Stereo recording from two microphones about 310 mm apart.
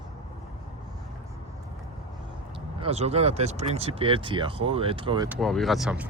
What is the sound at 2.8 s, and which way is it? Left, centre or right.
Speech, centre.